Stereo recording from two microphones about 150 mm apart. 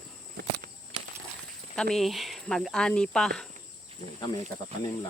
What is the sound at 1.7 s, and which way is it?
Speech, 5° left (ahead or behind).